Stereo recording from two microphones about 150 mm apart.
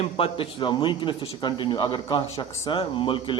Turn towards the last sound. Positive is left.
turn(degrees=35)  # may be behind; listen again after turning